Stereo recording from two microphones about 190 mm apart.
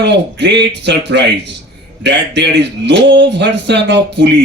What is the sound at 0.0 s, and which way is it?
Speech, 65° right (ahead or behind).